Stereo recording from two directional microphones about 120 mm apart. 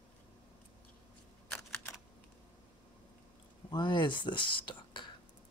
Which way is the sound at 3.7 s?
40° left (ahead or behind).